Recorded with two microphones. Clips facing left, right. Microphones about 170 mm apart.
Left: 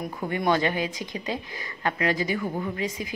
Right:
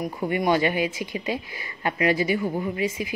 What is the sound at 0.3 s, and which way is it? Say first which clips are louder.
Speech: right 2 dB; 15° right (ahead or behind).